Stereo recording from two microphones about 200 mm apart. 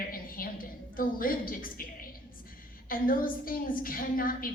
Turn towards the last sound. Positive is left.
turn(degrees=45)  # may be behind; listen again after turning